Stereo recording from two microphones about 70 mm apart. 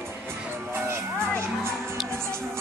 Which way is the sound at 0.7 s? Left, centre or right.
Right.